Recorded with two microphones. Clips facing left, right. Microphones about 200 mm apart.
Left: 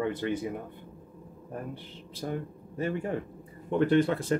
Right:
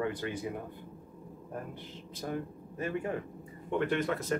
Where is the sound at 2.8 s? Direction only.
30° left (ahead or behind).